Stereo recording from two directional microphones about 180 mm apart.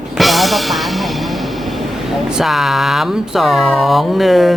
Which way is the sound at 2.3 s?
Centre (ahead or behind).